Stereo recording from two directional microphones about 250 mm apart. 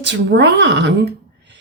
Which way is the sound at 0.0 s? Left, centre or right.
Right.